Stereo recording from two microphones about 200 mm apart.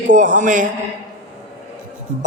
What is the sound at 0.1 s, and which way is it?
Speech, 40° right (ahead or behind).